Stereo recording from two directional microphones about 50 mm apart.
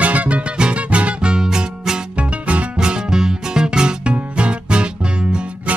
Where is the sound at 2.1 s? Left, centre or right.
Right.